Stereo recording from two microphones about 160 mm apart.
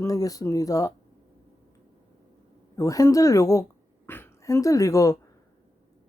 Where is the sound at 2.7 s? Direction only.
20° left (ahead or behind).